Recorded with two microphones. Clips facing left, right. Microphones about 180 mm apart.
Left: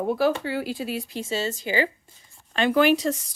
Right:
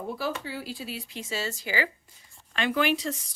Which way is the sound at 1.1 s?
25° left (ahead or behind).